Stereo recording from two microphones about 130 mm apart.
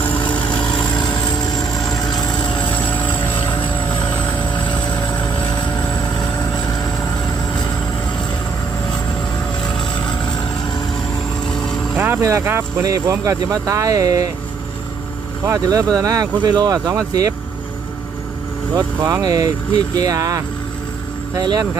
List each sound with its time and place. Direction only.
0.9 s vehicle: 5° left (ahead or behind)
9.6 s vehicle: 5° left (ahead or behind)
11.4 s vehicle: 5° left (ahead or behind)
11.9 s speech: 15° right (ahead or behind)
15.4 s speech: 20° right (ahead or behind)
19.0 s speech: 25° right (ahead or behind)